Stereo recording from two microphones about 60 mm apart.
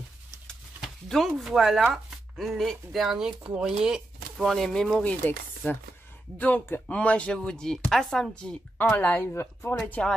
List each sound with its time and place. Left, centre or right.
0.8 s a sound: centre
1.4 s speech: centre
4.4 s speech: centre
5.0 s speech: left; by 8.5 s centre
8.9 s speech: left
10.0 s speech: left